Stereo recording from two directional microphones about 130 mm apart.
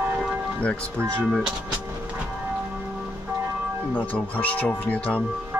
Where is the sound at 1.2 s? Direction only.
Centre (ahead or behind).